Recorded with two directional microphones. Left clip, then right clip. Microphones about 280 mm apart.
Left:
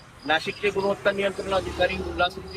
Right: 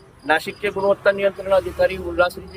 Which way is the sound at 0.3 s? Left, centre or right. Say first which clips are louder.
Right 4 dB; centre.